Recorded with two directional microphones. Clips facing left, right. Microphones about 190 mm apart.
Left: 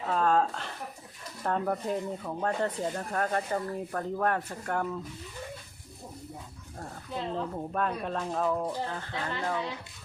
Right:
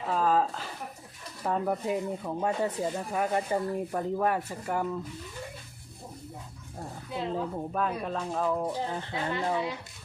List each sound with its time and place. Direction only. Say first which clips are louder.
0.0 s a sound: even; 5° right (ahead or behind)
1.5 s speech: right 1 dB; 5° right (ahead or behind)
6.7 s speech: right 1 dB; 10° right (ahead or behind)
8.9 s speech: right 3 dB; 20° right (ahead or behind)